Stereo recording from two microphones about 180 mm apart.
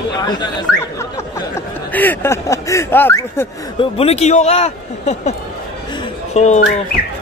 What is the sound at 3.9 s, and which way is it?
A man's voice, 35° left (ahead or behind).